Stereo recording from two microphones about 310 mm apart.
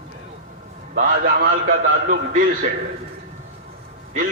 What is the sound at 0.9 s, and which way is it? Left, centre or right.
A man's voice, right.